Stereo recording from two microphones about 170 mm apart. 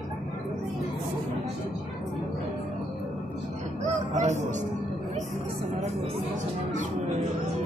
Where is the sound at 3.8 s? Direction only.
45° right (ahead or behind).